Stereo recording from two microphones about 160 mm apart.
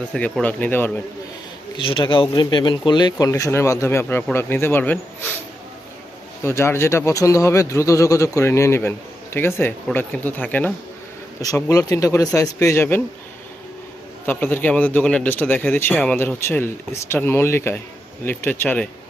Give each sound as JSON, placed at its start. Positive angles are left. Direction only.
{"t": 0.1, "sound": "speech", "side_deg": 5}
{"t": 1.7, "sound": "speech", "side_deg": 30}
{"t": 6.4, "sound": "speech", "side_deg": 15}
{"t": 14.3, "sound": "speech", "side_deg": 10}